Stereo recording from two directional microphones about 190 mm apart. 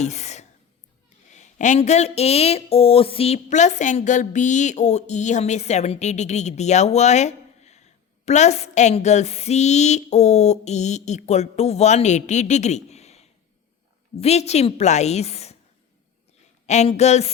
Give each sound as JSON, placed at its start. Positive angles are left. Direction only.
{"t": 0.0, "sound": "a sound", "side_deg": 35}
{"t": 1.3, "sound": "speech", "side_deg": 40}
{"t": 16.6, "sound": "speech", "side_deg": 35}